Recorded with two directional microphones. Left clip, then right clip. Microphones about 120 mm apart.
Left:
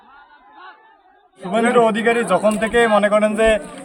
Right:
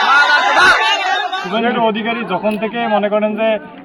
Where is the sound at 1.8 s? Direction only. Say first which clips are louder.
Left 1 dB; 25° left (ahead or behind).